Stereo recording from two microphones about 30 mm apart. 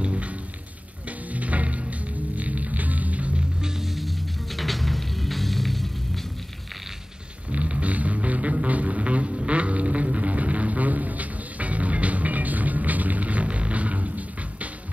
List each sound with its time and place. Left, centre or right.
0.0 s music: right
1.3 s music: right
3.8 s music: centre
7.5 s music: right